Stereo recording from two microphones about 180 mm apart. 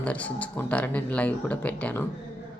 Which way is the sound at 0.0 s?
5° left (ahead or behind).